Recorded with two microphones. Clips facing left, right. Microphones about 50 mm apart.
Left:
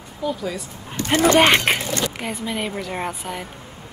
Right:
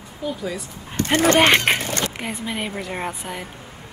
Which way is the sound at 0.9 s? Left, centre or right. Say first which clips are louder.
Left 1 dB; right.